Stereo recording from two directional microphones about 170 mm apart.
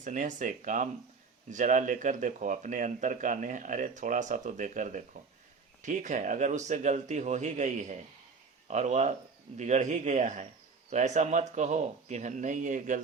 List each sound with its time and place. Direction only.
0.0 s speech: 50° right (ahead or behind)